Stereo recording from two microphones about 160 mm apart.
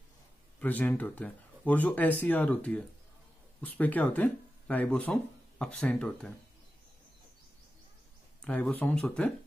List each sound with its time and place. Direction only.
0.6 s speech: 10° left (ahead or behind)
8.4 s speech: 5° left (ahead or behind)